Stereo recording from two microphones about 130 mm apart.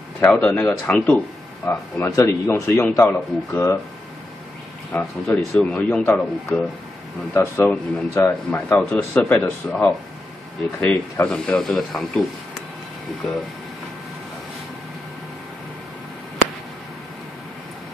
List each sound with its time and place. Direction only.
0.2 s speech: 10° left (ahead or behind)
5.2 s speech: centre (ahead or behind)